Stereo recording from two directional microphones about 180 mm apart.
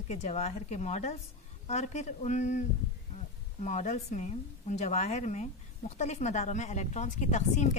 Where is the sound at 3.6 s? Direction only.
40° left (ahead or behind).